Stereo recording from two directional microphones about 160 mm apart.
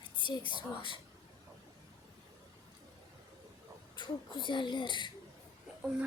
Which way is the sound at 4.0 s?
30° left (ahead or behind).